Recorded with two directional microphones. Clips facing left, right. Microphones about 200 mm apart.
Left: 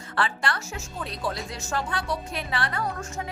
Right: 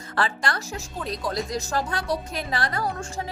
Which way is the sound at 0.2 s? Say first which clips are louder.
Right 1 dB; 40° right (ahead or behind).